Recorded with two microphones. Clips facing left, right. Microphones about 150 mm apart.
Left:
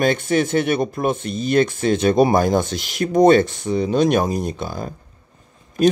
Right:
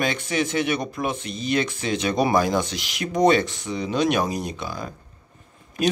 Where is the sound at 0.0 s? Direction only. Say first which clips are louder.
Left 6 dB; 50° left (ahead or behind).